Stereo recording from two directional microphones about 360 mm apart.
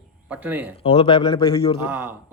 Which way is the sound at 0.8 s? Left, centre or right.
Centre.